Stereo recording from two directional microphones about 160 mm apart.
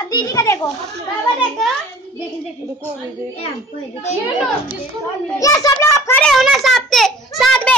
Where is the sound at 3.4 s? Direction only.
40° left (ahead or behind).